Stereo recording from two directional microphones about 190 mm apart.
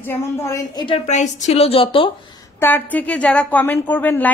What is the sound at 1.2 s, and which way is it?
Speech, 35° left (ahead or behind).